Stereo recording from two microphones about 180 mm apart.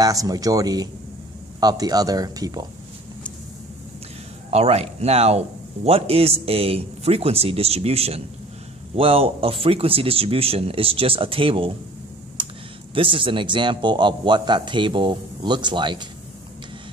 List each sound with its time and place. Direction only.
0.0 s a man's voice: 20° right (ahead or behind)
4.5 s speech: 35° right (ahead or behind)
12.4 s computer keyboard: 25° right (ahead or behind)
12.9 s a man's voice: 30° right (ahead or behind)